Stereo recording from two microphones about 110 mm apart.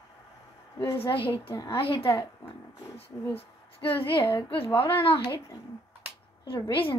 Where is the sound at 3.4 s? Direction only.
55° left (ahead or behind).